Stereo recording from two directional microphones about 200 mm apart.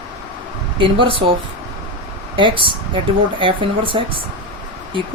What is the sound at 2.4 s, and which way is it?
Speech, 25° right (ahead or behind).